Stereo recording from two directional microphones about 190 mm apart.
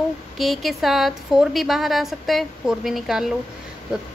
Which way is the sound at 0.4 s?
Centre (ahead or behind).